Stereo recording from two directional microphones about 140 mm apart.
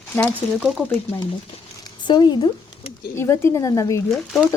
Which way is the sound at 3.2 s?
20° left (ahead or behind).